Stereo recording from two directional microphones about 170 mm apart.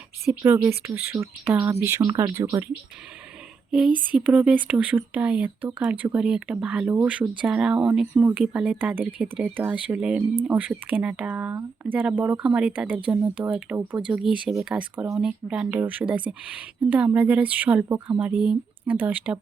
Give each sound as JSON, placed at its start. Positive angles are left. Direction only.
{"t": 0.3, "sound": "speech", "side_deg": -15}
{"t": 3.7, "sound": "speech", "side_deg": -5}